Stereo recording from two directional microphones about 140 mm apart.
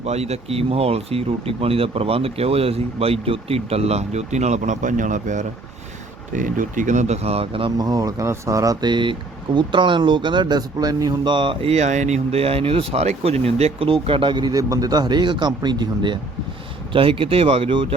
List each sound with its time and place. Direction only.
0.0 s speech: 50° right (ahead or behind)
7.8 s speech: 25° right (ahead or behind)